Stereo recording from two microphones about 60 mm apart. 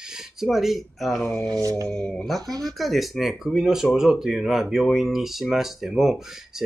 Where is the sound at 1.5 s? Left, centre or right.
Right.